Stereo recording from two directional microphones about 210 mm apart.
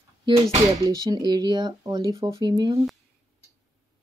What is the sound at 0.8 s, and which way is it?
Speech, 20° right (ahead or behind).